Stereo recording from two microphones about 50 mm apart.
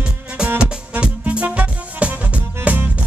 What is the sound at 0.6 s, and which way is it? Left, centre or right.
Music, right.